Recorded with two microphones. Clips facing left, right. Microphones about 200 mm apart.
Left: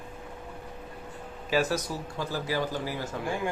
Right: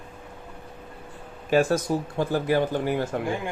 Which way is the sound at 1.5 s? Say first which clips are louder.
Right 6 dB; 50° right (ahead or behind).